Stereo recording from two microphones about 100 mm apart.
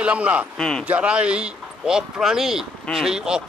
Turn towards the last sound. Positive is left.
turn(degrees=-5)  # may be behind; listen again after turning